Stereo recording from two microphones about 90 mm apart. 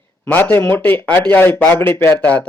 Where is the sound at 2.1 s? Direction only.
15° left (ahead or behind).